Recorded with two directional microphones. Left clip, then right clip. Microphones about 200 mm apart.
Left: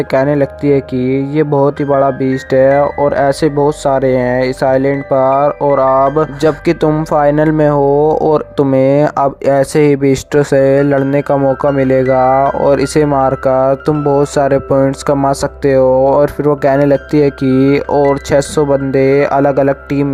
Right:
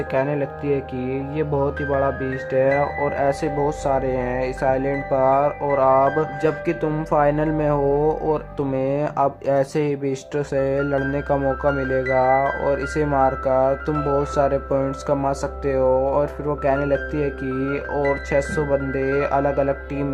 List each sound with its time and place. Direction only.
0.1 s speech: 45° left (ahead or behind)